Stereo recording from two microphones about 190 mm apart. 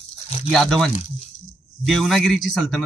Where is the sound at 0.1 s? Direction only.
35° left (ahead or behind).